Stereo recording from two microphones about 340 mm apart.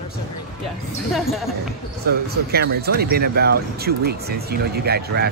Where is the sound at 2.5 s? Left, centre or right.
Right.